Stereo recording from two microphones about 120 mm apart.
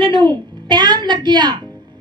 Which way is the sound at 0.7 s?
40° right (ahead or behind).